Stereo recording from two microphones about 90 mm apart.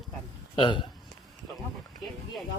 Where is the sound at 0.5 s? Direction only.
65° left (ahead or behind).